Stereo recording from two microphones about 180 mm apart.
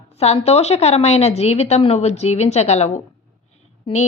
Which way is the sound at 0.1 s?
35° left (ahead or behind).